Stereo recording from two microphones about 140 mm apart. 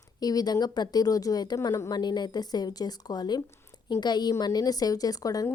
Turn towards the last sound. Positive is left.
turn(degrees=25)  # may be behind; listen again after turning